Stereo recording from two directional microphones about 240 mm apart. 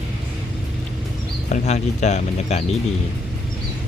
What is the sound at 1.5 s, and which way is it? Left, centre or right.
Speech, left.